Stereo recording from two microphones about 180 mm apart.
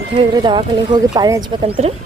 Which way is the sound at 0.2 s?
25° right (ahead or behind).